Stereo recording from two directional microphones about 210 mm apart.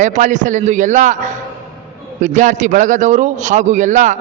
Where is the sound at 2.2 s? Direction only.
35° right (ahead or behind).